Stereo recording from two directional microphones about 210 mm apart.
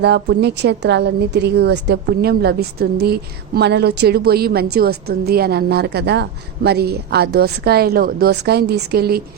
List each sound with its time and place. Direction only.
0.0 s a woman's voice: 55° right (ahead or behind)